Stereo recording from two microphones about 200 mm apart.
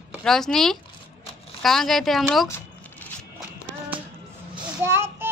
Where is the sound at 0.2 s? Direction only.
5° left (ahead or behind).